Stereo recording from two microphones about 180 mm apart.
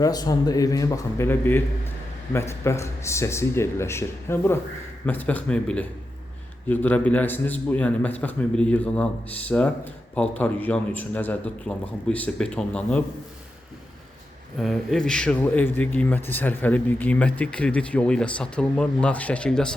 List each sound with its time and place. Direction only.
0.0 s a man's voice: 20° left (ahead or behind)
14.6 s a man's voice: centre (ahead or behind)